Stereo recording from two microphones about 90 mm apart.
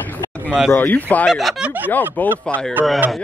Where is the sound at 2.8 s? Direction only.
20° right (ahead or behind).